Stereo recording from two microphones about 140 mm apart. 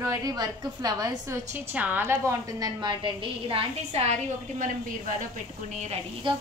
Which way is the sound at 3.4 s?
45° right (ahead or behind).